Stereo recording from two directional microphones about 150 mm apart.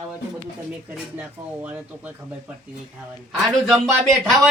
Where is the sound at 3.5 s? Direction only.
Centre (ahead or behind).